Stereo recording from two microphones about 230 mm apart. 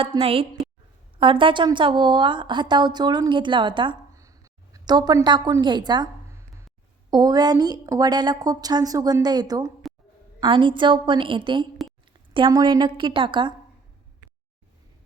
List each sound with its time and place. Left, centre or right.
0.0 s a woman's voice: right
7.1 s a woman's voice: centre